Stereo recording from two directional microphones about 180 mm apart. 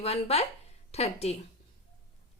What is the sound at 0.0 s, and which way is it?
Speech, 35° left (ahead or behind).